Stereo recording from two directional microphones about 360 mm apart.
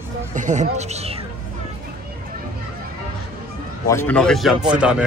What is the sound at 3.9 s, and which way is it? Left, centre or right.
Speech, centre.